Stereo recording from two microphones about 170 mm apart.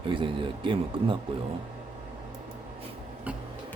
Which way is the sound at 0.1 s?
30° right (ahead or behind).